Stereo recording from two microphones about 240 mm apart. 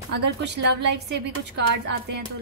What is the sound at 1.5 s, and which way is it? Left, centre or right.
Speech, right.